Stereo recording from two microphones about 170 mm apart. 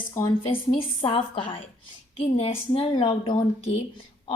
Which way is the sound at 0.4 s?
35° left (ahead or behind).